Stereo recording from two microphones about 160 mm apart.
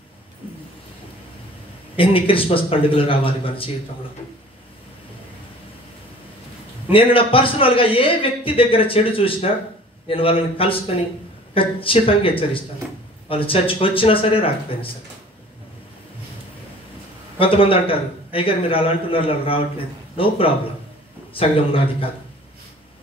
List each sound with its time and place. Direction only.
2.0 s a man's voice: 35° left (ahead or behind)
6.9 s a man's voice: 35° left (ahead or behind)
17.4 s a man's voice: 35° left (ahead or behind)